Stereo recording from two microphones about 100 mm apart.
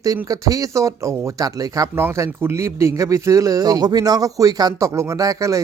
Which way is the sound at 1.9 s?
20° right (ahead or behind).